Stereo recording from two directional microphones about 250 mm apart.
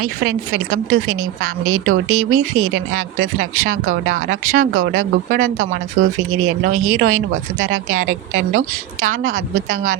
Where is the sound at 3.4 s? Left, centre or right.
Right.